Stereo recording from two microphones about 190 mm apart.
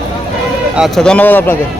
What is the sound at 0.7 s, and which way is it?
Speech, centre (ahead or behind).